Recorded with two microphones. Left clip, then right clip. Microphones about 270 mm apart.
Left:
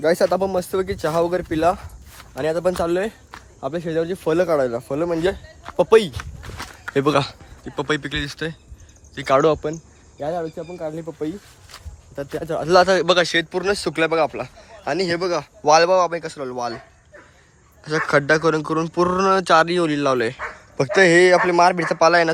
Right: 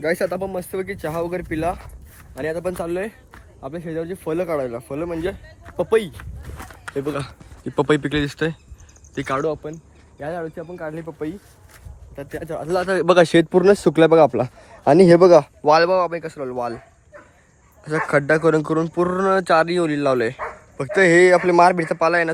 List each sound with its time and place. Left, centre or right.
0.0 s a man's voice: centre; by 7.2 s left
7.6 s a man's voice: centre
9.6 s a man's voice: left
10.2 s a man's voice: centre
12.1 s speech: centre
12.5 s a man's voice: left
12.9 s speech: centre
15.6 s a man's voice: centre
17.8 s a man's voice: centre